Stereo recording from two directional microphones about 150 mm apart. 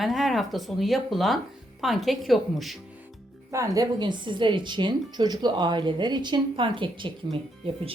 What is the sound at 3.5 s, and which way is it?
Speech, 20° right (ahead or behind).